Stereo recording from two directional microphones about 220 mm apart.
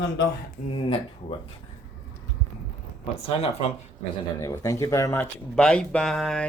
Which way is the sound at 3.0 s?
25° left (ahead or behind).